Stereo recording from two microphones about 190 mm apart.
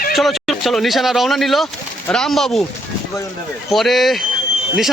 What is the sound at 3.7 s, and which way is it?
Speech, centre (ahead or behind).